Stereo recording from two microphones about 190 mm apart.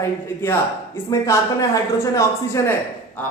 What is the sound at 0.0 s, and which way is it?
A woman's voice, 15° left (ahead or behind).